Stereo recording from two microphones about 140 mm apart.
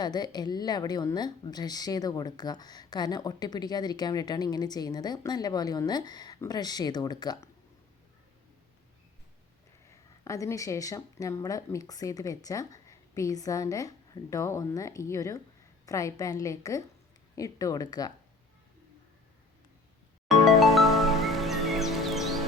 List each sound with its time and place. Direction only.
0.0 s a woman's voice: 30° left (ahead or behind)
10.2 s a woman's voice: 25° left (ahead or behind)
20.2 s music: centre (ahead or behind)